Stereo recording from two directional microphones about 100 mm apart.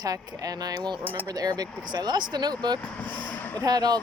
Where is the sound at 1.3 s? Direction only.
40° right (ahead or behind).